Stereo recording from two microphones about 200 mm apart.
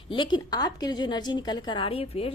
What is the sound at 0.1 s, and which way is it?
A woman's voice, 25° left (ahead or behind).